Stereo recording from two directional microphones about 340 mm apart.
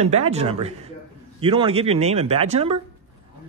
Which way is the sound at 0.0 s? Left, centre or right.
Centre.